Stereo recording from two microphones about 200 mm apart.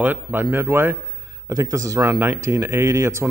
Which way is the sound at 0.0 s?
10° right (ahead or behind).